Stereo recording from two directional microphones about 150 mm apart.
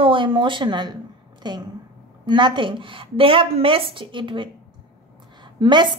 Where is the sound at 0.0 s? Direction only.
35° right (ahead or behind).